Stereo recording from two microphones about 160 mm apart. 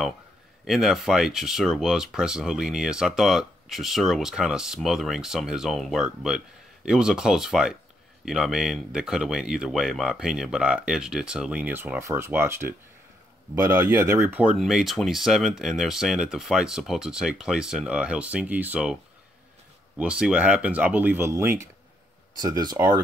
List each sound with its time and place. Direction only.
0.7 s speech: centre (ahead or behind)
20.0 s speech: 5° right (ahead or behind); by 22.8 s 25° right (ahead or behind)